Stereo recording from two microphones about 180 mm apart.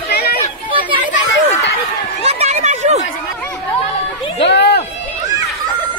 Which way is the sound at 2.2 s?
35° right (ahead or behind).